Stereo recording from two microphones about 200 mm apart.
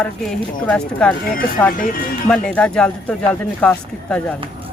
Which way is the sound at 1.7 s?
45° left (ahead or behind).